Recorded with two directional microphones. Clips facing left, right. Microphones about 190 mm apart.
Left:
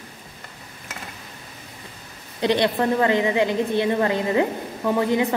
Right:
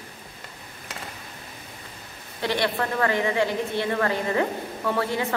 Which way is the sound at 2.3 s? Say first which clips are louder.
Left 5 dB; 20° left (ahead or behind).